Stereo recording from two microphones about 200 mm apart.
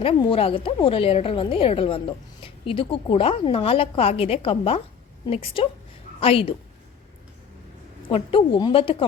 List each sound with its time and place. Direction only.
0.0 s a woman's voice: 25° left (ahead or behind)
8.1 s a woman's voice: 25° left (ahead or behind)